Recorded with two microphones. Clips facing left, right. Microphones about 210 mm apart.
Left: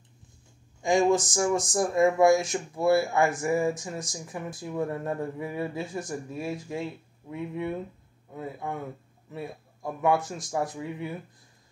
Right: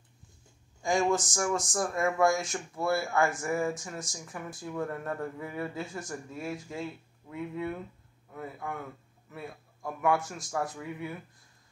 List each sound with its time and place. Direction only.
0.8 s speech: 20° left (ahead or behind)